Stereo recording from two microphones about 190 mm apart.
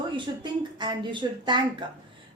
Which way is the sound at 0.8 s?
25° right (ahead or behind).